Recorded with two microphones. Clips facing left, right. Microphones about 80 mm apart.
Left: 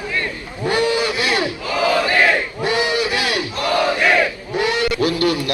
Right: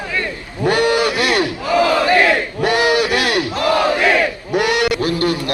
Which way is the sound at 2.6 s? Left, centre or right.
Right.